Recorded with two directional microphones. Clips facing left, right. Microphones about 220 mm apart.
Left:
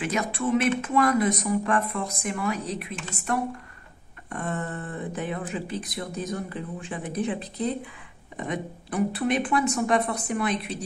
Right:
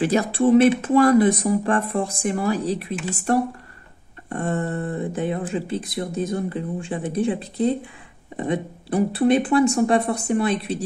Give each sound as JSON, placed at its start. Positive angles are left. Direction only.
{"t": 0.0, "sound": "speech", "side_deg": -30}
{"t": 4.3, "sound": "speech", "side_deg": -30}
{"t": 4.7, "sound": "speech", "side_deg": -40}
{"t": 5.1, "sound": "speech", "side_deg": -30}